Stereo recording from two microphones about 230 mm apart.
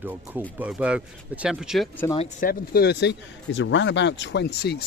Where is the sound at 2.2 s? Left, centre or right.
Left.